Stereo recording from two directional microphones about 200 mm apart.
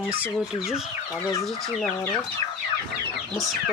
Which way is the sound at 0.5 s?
5° right (ahead or behind).